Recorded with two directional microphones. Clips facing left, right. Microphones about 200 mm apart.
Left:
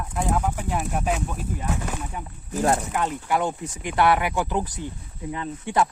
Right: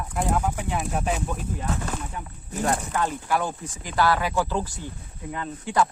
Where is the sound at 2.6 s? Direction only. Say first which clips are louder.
Left 2 dB; 20° left (ahead or behind).